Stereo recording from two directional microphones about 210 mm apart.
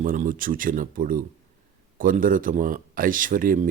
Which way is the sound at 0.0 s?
40° right (ahead or behind).